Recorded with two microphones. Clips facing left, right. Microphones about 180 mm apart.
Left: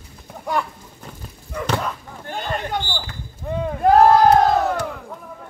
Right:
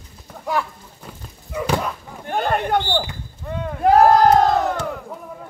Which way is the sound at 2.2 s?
55° right (ahead or behind).